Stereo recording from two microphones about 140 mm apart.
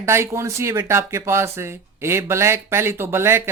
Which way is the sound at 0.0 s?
20° right (ahead or behind).